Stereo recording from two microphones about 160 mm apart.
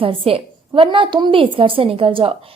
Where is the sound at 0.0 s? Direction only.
35° right (ahead or behind).